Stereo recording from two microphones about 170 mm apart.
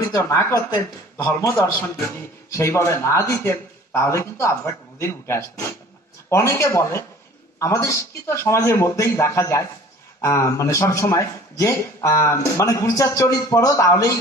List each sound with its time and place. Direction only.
0.0 s a man's voice: 20° left (ahead or behind)